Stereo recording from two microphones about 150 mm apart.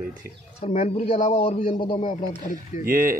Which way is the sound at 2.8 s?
70° right (ahead or behind).